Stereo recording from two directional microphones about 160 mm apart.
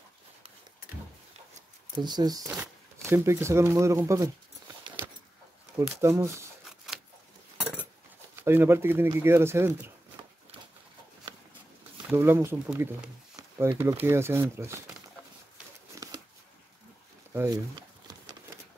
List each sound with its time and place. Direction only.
2.0 s speech: 25° right (ahead or behind)
5.0 s keys jangling: 15° right (ahead or behind)
5.9 s speech: 20° right (ahead or behind)
8.4 s speech: 15° right (ahead or behind)
12.1 s speech: 15° right (ahead or behind)
15.9 s a sound: 20° right (ahead or behind)
17.3 s speech: 15° right (ahead or behind)